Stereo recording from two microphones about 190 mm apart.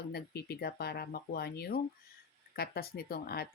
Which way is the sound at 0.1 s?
55° left (ahead or behind).